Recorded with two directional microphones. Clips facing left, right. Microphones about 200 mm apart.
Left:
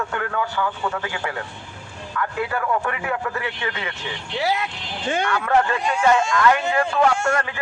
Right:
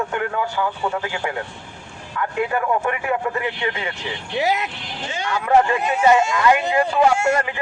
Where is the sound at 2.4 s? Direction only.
20° right (ahead or behind).